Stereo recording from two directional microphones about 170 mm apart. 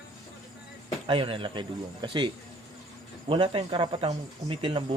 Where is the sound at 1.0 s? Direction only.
30° right (ahead or behind).